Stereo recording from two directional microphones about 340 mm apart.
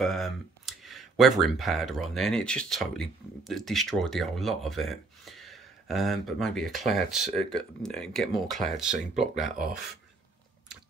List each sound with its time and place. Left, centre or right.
0.0 s speech: centre
9.5 s speech: right